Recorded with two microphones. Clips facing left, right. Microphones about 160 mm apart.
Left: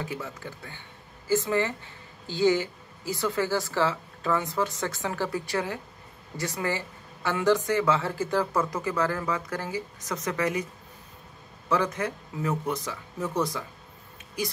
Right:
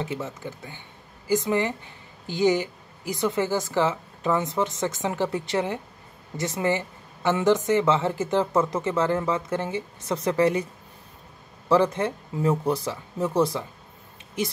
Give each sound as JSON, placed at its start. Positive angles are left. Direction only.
{"t": 0.0, "sound": "speech", "side_deg": -20}
{"t": 11.7, "sound": "speech", "side_deg": -30}